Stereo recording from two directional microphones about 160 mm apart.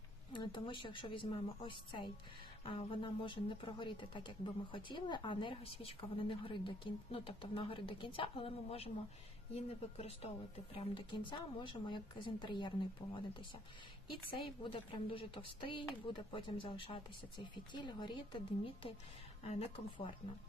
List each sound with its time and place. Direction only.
0.3 s a woman's voice: 30° left (ahead or behind)
14.1 s a woman's voice: 30° left (ahead or behind)